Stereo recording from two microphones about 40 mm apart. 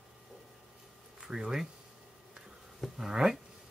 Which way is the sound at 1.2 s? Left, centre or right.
Centre.